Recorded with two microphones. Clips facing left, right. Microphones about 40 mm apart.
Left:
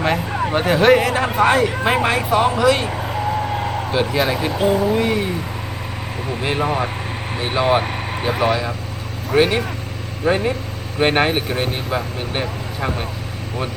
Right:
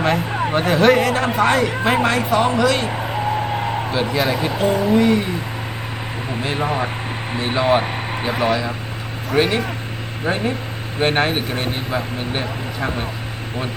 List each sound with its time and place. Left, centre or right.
0.0 s a man's voice: centre
6.6 s speech: centre